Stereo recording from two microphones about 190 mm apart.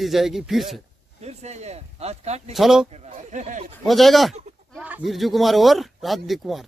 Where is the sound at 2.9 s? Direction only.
35° right (ahead or behind).